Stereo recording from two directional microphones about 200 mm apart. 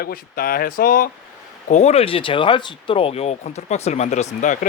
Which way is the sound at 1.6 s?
35° left (ahead or behind).